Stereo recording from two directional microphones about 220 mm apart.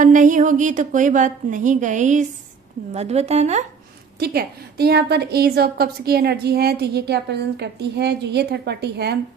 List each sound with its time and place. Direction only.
0.0 s a woman's voice: 35° right (ahead or behind)
4.2 s a woman's voice: 45° right (ahead or behind)